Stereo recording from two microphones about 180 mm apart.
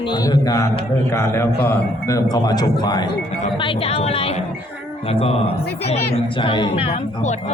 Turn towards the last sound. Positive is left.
turn(degrees=40)  # may be behind; listen again after turning